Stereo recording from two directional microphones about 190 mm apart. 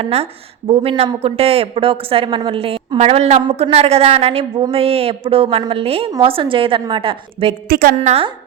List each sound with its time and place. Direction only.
0.0 s a woman's voice: 35° right (ahead or behind)
7.7 s a woman's voice: 50° right (ahead or behind)
7.9 s speech: 35° right (ahead or behind)